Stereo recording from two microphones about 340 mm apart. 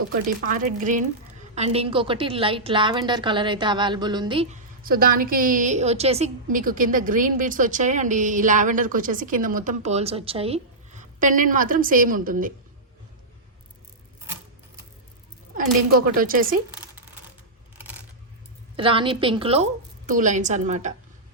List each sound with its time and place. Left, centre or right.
0.3 s a woman's voice: right
15.5 s a woman's voice: right
18.8 s a woman's voice: centre